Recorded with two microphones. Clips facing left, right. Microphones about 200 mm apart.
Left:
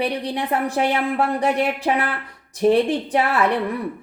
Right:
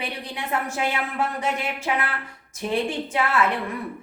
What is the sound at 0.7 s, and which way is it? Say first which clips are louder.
A woman's voice: left 6 dB; 35° left (ahead or behind).